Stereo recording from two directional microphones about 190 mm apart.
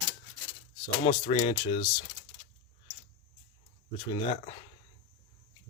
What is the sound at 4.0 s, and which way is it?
Speech, 25° left (ahead or behind).